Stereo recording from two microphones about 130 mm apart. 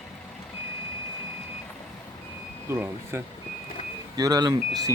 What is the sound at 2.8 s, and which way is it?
Speech, 15° right (ahead or behind).